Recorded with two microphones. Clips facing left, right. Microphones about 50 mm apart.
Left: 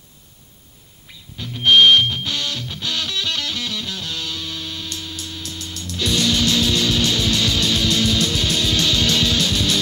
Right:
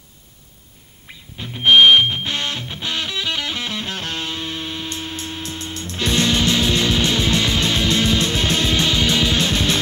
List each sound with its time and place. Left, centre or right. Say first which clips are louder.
1.4 s music: right 1 dB; right